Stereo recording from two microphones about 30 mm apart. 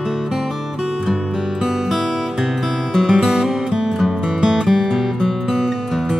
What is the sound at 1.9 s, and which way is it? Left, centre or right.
Music, centre.